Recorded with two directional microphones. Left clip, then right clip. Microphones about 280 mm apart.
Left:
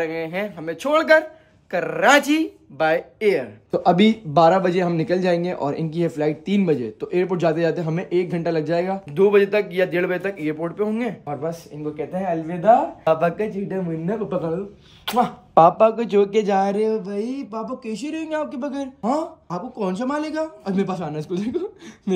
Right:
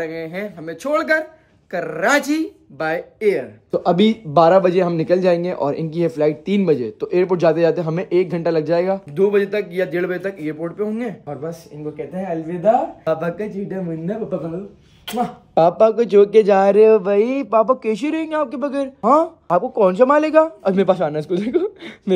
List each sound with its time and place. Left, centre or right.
0.0 s speech: centre
17.0 s a sound: right
17.6 s speech: centre